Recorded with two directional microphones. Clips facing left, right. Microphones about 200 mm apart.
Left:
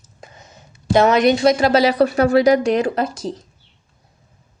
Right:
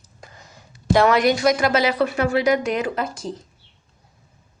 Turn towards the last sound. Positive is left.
turn(degrees=35)  # may be behind; listen again after turning